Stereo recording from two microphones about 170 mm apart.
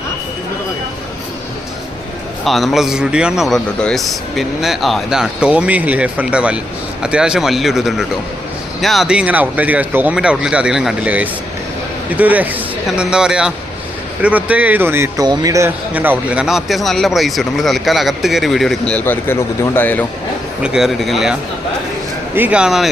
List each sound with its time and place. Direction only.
2.4 s a man's voice: centre (ahead or behind)
20.6 s a man's voice: 5° right (ahead or behind)
22.4 s a man's voice: 5° right (ahead or behind)